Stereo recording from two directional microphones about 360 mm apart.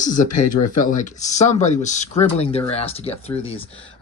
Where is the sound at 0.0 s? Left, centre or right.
Left.